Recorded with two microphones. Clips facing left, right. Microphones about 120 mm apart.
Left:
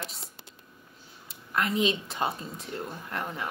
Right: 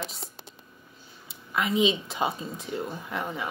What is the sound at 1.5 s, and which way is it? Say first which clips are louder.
A woman's voice: right 2 dB; 15° right (ahead or behind).